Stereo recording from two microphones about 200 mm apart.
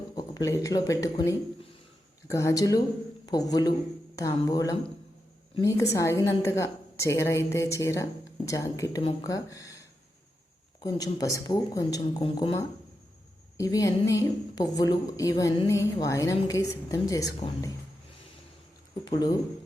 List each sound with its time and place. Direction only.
0.2 s a woman's voice: 20° left (ahead or behind)
10.8 s speech: 20° left (ahead or behind)
13.6 s a woman's voice: 15° left (ahead or behind)
19.0 s speech: 20° left (ahead or behind)